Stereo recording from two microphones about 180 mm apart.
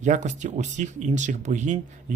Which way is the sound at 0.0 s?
40° right (ahead or behind).